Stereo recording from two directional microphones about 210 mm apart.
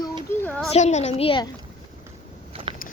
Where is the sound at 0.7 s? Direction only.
30° left (ahead or behind).